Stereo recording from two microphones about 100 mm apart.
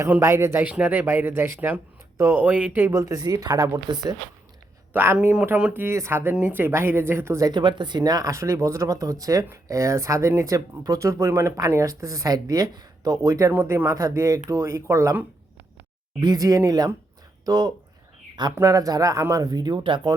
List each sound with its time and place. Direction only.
0.1 s speech: 25° right (ahead or behind)
2.8 s speech: 35° right (ahead or behind)
5.1 s speech: 10° right (ahead or behind)
5.8 s speech: 25° right (ahead or behind)
7.4 s speech: 50° right (ahead or behind); by 15.2 s 25° right (ahead or behind)
16.2 s speech: 40° right (ahead or behind)